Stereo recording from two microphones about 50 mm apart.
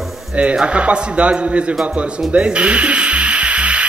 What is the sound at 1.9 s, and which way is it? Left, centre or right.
Music, right.